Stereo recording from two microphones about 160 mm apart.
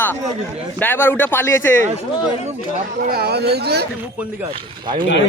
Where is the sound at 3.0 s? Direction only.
70° right (ahead or behind); by 3.8 s 90° right.